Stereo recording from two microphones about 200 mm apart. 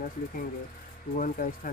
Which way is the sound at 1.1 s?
45° left (ahead or behind).